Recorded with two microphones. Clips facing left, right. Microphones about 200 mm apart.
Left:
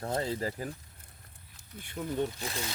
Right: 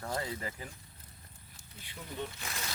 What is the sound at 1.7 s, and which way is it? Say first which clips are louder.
Speech: left 9 dB; 50° left (ahead or behind).